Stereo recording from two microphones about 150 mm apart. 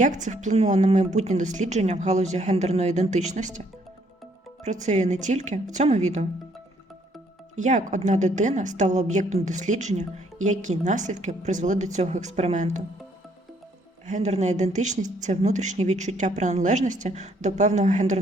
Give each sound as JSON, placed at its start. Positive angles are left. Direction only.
{"t": 0.0, "sound": "a woman's voice", "side_deg": -55}
{"t": 7.5, "sound": "a woman's voice", "side_deg": -55}
{"t": 14.1, "sound": "a woman's voice", "side_deg": -50}